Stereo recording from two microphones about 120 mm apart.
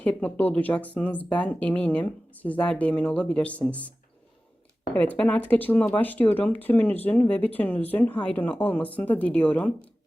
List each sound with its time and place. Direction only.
0.0 s speech: 10° left (ahead or behind)
4.9 s speech: 10° left (ahead or behind)